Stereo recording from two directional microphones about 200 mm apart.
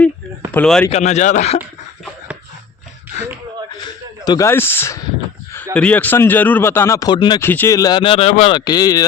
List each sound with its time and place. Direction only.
0.5 s speech: 5° left (ahead or behind)
0.9 s speech: 35° left (ahead or behind)
4.3 s speech: 15° left (ahead or behind)
7.4 s speech: 10° left (ahead or behind)